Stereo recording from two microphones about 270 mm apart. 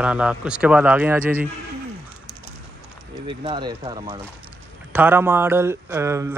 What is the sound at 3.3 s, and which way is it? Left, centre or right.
A man's voice, centre.